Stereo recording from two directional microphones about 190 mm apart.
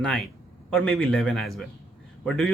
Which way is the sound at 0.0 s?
5° left (ahead or behind).